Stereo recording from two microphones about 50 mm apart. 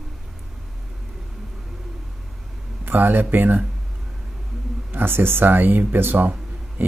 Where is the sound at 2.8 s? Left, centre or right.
Right.